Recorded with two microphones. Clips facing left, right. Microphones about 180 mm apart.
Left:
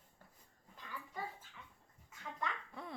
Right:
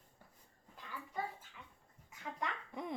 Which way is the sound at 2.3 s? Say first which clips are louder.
Right 1 dB; 15° right (ahead or behind).